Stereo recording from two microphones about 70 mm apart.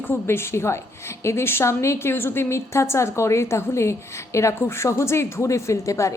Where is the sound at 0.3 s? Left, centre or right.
Left.